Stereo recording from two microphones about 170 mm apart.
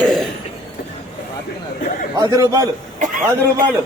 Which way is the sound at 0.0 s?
Centre (ahead or behind).